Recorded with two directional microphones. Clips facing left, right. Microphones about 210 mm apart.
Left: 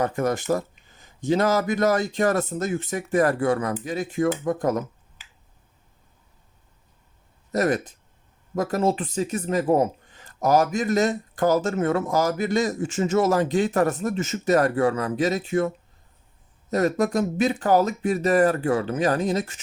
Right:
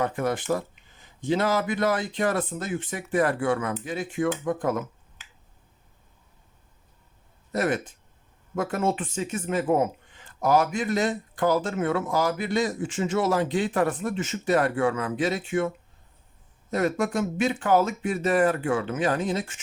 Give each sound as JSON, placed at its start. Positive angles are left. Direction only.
{"t": 0.0, "sound": "speech", "side_deg": 45}
{"t": 7.5, "sound": "speech", "side_deg": 40}
{"t": 16.7, "sound": "speech", "side_deg": 40}